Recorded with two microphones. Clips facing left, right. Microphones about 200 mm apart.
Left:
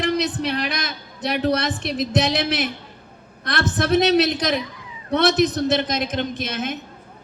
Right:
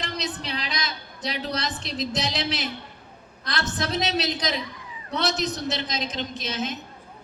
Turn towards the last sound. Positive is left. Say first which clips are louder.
# left 4 dB
turn(degrees=55)  # may be behind; listen again after turning